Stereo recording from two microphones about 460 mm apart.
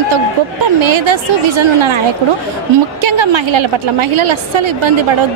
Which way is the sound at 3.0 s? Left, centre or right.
Right.